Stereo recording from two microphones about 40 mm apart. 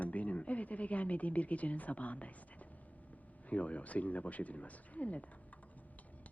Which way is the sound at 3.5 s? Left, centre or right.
Left.